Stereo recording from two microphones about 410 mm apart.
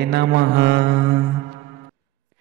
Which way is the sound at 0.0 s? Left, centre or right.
Right.